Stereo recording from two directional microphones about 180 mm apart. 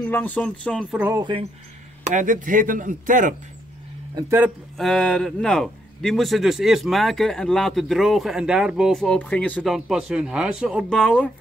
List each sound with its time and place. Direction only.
0.0 s speech: 10° left (ahead or behind)
0.9 s speech: 15° right (ahead or behind)
2.0 s speech: 45° right (ahead or behind)
4.1 s speech: 20° right (ahead or behind)
4.7 s a man's voice: centre (ahead or behind)
9.6 s a man's voice: 5° right (ahead or behind)